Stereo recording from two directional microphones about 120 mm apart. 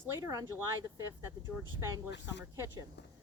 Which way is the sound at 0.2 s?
30° right (ahead or behind).